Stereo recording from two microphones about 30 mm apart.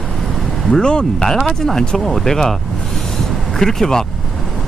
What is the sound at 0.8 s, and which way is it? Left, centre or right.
Speech, left.